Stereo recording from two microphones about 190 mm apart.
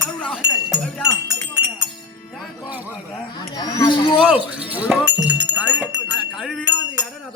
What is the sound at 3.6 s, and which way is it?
Chatter, 20° left (ahead or behind).